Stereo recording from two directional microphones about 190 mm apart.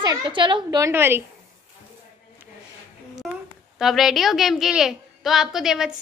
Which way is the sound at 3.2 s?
5° right (ahead or behind).